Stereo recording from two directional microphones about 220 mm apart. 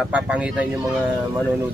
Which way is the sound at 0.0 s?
5° right (ahead or behind).